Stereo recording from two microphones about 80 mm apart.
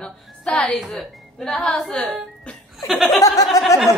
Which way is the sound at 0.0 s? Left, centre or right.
Centre.